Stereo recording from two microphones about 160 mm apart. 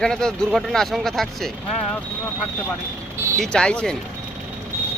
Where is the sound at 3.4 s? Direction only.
5° left (ahead or behind).